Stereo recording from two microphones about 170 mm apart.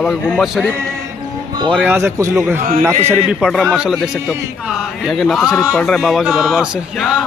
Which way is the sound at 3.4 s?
Centre (ahead or behind).